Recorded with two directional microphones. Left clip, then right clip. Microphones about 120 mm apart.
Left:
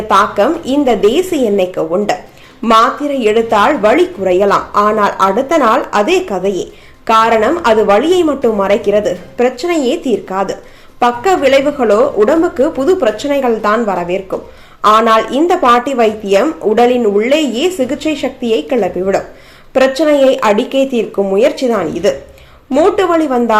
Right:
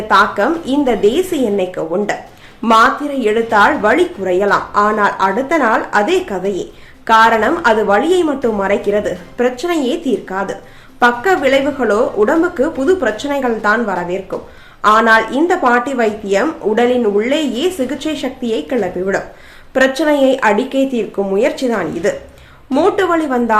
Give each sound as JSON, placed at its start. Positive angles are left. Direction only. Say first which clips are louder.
{"t": 0.1, "sound": "a woman's voice", "louder": "left 2 dB", "side_deg": 20}
{"t": 3.1, "sound": "a woman's voice", "louder": "left 3 dB", "side_deg": 25}